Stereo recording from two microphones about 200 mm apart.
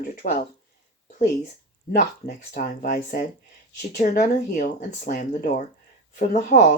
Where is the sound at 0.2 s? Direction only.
45° left (ahead or behind).